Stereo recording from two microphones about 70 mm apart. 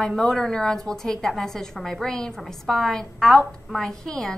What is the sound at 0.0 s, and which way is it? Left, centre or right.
A woman's voice, centre.